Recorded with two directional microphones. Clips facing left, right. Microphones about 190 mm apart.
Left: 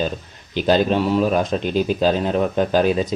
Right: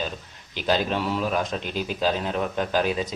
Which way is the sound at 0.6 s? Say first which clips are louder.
Left 7 dB; 25° left (ahead or behind).